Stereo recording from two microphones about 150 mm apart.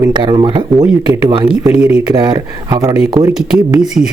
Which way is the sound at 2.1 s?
30° right (ahead or behind).